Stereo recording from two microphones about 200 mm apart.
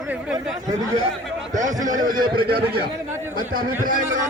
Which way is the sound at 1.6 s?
40° right (ahead or behind).